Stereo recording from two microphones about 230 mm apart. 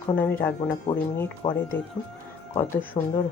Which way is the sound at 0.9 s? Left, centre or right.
Left.